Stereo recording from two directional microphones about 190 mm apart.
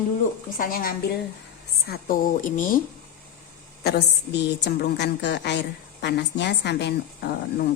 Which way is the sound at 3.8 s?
60° left (ahead or behind).